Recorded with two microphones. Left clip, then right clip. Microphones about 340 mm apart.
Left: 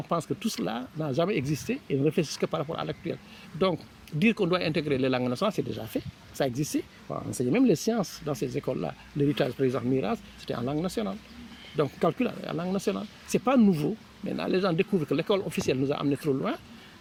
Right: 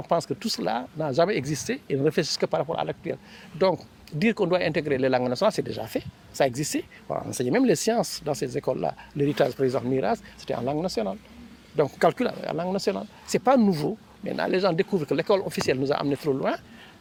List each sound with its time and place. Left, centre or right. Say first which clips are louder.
0.1 s speech: right 5 dB; right
4.2 s speech: right 3 dB; right